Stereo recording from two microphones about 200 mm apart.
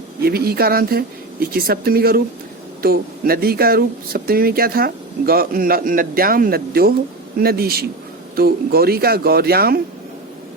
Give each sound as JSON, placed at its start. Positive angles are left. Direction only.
{"t": 0.2, "sound": "speech", "side_deg": -50}